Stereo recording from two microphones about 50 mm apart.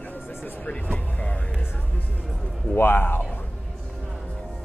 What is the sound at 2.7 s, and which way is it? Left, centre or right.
Speech, left.